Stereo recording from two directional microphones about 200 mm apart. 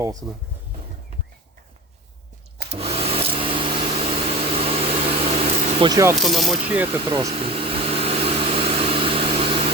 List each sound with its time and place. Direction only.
0.0 s speech: 15° right (ahead or behind)
2.7 s vacuum cleaner: 30° right (ahead or behind)
5.9 s speech: 15° right (ahead or behind)
6.2 s speech: centre (ahead or behind)
7.0 s vehicle: 25° right (ahead or behind)